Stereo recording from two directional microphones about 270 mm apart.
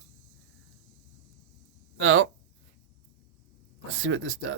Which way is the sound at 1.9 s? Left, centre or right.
Right.